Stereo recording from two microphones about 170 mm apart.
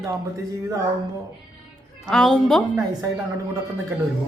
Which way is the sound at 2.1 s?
5° left (ahead or behind).